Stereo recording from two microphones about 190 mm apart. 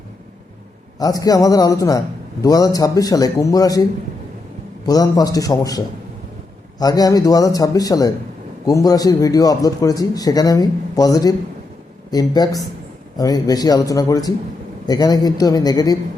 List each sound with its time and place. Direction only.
0.9 s a man's voice: 20° left (ahead or behind)
4.9 s a man's voice: 20° left (ahead or behind)